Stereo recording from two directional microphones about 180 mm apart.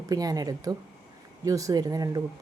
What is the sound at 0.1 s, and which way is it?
A woman's voice, 20° right (ahead or behind).